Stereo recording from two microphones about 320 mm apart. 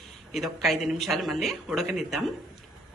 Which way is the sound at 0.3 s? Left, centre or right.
Centre.